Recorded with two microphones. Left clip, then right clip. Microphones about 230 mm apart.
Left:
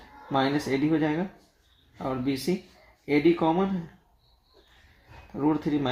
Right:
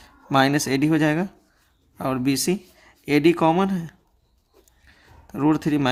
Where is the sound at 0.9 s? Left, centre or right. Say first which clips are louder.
Right 5 dB; right.